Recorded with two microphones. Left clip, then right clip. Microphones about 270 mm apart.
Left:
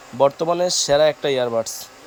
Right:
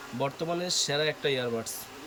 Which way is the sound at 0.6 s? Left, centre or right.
Centre.